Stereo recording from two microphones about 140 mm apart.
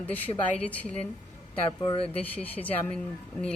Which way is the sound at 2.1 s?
10° left (ahead or behind).